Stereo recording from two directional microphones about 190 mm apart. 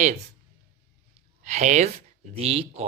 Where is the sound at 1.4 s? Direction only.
40° right (ahead or behind).